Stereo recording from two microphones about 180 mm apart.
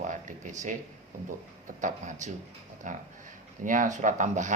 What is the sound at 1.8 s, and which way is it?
Speech, 40° right (ahead or behind).